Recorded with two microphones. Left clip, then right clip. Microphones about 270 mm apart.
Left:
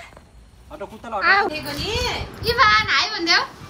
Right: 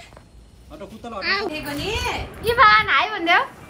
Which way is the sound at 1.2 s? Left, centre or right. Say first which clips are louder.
Left 6 dB; centre.